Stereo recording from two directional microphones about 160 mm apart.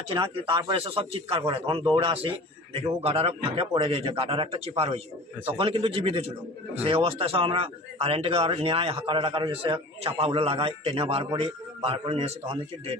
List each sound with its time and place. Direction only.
0.1 s a man's voice: 30° right (ahead or behind)